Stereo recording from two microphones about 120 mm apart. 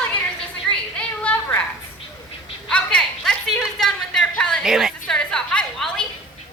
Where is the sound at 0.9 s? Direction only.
10° left (ahead or behind).